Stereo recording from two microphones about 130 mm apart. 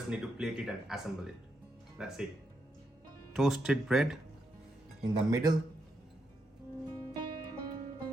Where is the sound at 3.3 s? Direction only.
Centre (ahead or behind).